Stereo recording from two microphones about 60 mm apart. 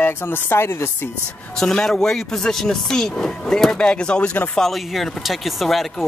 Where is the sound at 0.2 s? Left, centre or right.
Left.